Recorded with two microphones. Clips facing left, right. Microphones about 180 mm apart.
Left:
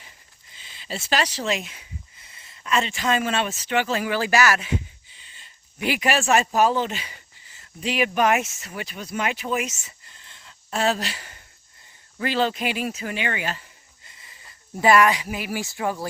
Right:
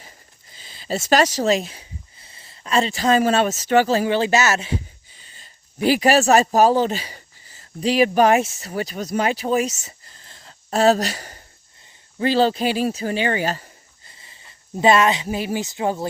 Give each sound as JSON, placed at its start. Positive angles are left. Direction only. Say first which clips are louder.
{"t": 0.5, "sound": "speech", "louder": "right 8 dB", "side_deg": -40}
{"t": 5.1, "sound": "speech", "louder": "right 3 dB", "side_deg": -40}